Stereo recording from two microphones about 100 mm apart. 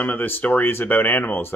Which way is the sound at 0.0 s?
15° left (ahead or behind).